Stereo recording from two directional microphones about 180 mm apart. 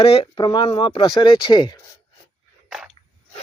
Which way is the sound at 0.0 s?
30° left (ahead or behind).